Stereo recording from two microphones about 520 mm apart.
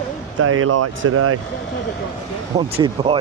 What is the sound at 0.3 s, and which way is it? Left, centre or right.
Speech, right.